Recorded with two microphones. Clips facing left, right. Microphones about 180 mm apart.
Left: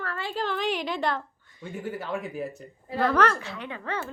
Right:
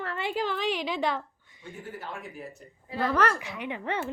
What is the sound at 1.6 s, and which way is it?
Speech, 80° left.